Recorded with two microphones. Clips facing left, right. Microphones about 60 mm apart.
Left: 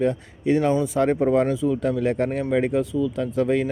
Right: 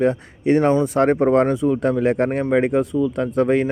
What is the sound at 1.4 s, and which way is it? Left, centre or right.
A man's voice, right.